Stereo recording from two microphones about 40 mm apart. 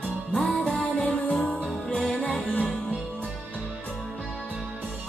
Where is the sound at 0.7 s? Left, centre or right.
Left.